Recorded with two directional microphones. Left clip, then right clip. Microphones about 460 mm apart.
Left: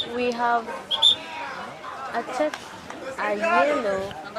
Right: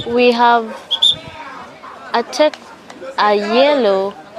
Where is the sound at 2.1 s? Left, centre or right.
Right.